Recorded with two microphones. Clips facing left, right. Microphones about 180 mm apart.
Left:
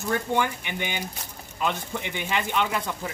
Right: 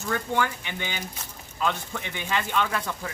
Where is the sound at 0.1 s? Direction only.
15° left (ahead or behind).